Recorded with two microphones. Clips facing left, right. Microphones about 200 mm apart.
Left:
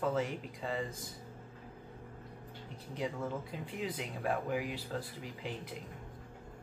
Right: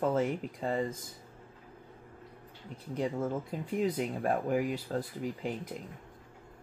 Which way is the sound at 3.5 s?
45° right (ahead or behind).